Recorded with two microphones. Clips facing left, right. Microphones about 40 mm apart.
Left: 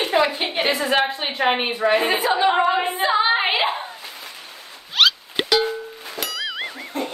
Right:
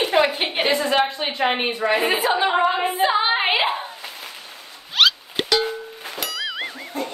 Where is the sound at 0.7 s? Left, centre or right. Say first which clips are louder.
Even; centre.